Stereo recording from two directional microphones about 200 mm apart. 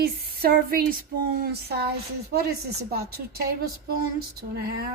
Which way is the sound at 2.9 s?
50° right (ahead or behind).